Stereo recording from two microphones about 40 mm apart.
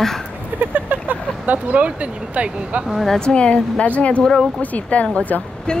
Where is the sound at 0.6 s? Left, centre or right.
Right.